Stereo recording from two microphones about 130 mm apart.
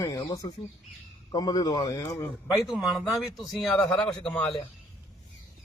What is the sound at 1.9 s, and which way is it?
Speech, 20° left (ahead or behind).